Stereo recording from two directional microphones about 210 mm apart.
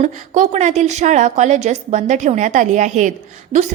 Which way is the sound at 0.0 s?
35° right (ahead or behind).